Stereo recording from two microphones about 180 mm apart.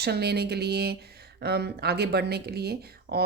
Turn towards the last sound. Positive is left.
turn(degrees=-65)  # may be behind; listen again after turning